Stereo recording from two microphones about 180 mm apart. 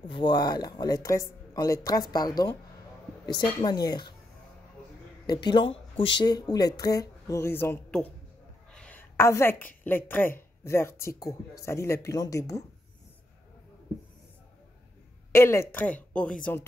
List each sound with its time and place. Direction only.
0.0 s speech: 25° left (ahead or behind)
5.2 s a woman's voice: 25° left (ahead or behind)
15.3 s speech: 15° left (ahead or behind)